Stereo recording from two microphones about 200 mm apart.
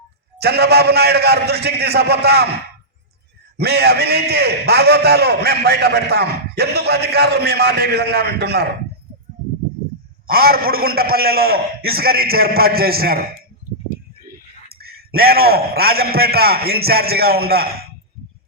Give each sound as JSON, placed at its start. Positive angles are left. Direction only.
{"t": 0.3, "sound": "a man's voice", "side_deg": -55}
{"t": 3.6, "sound": "a man's voice", "side_deg": -55}
{"t": 10.2, "sound": "a man's voice", "side_deg": -50}
{"t": 14.7, "sound": "a man's voice", "side_deg": -50}